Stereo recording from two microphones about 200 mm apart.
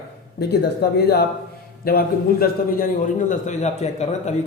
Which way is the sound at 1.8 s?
50° left (ahead or behind).